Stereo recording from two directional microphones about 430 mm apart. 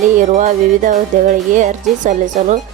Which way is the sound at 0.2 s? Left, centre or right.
Centre.